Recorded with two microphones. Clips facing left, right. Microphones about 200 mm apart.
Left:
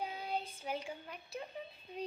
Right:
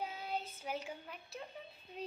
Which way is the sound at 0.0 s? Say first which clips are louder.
Left 2 dB; 5° right (ahead or behind).